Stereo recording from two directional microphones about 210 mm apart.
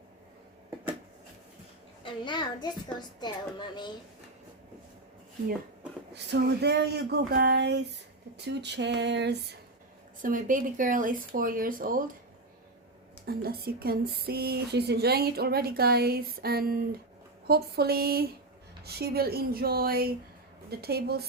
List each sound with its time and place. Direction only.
2.0 s a child's voice: 20° left (ahead or behind)
6.1 s speech: 55° right (ahead or behind)
8.4 s a sound: 55° right (ahead or behind)
10.2 s speech: 40° right (ahead or behind)
13.2 s speech: 45° right (ahead or behind)